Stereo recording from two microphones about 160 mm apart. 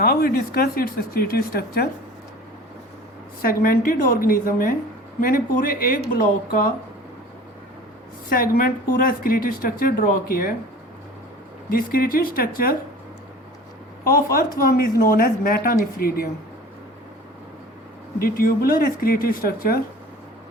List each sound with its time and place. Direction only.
0.0 s speech: 65° left (ahead or behind)
3.4 s speech: 65° left (ahead or behind)
8.3 s speech: 65° left (ahead or behind)
11.7 s speech: 65° left (ahead or behind)
14.0 s speech: 65° left (ahead or behind)
18.2 s speech: 65° left (ahead or behind)